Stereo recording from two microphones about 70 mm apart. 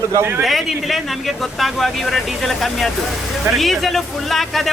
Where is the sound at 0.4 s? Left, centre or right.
Centre.